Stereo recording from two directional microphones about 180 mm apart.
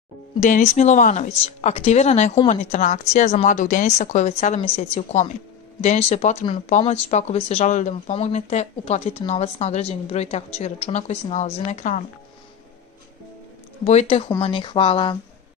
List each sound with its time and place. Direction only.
0.4 s speech: 40° left (ahead or behind)
13.8 s speech: 35° left (ahead or behind)